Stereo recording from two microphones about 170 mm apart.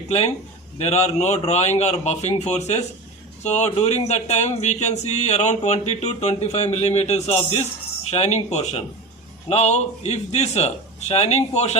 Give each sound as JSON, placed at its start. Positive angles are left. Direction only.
{"t": 0.1, "sound": "speech", "side_deg": 40}